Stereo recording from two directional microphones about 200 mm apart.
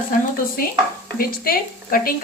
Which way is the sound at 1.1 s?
45° left (ahead or behind).